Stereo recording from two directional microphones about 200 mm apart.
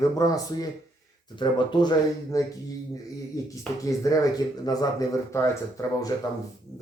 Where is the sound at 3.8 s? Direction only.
15° left (ahead or behind).